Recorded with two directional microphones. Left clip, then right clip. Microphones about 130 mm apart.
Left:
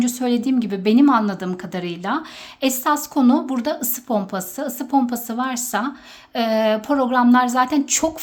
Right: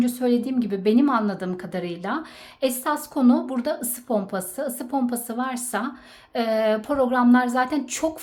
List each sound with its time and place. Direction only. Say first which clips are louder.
0.0 s a woman's voice: left 1 dB; 25° left (ahead or behind)